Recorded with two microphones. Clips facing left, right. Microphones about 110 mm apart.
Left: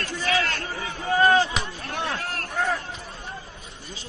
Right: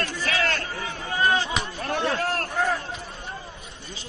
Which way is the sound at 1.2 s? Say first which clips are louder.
Left 4 dB; 35° left (ahead or behind).